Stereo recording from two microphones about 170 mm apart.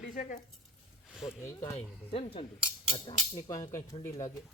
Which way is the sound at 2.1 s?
30° left (ahead or behind).